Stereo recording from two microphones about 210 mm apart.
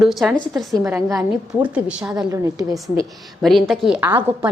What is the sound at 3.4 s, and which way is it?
A woman's voice, centre (ahead or behind).